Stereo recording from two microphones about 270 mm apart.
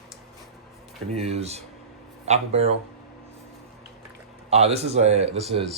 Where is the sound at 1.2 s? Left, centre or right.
Right.